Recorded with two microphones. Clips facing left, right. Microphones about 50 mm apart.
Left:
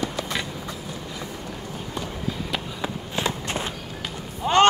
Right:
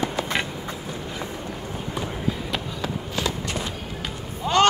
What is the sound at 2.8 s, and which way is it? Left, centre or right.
Walk, left.